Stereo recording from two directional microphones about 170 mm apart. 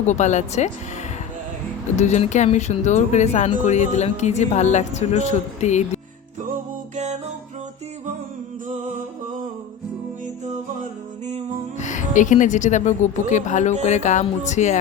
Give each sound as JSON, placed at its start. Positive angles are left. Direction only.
{"t": 0.1, "sound": "speech", "side_deg": 45}
{"t": 2.0, "sound": "speech", "side_deg": 45}
{"t": 6.4, "sound": "music", "side_deg": -50}
{"t": 11.3, "sound": "music", "side_deg": -40}
{"t": 11.8, "sound": "speech", "side_deg": 45}